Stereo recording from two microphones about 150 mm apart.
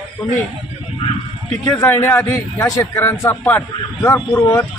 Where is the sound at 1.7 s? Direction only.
20° left (ahead or behind).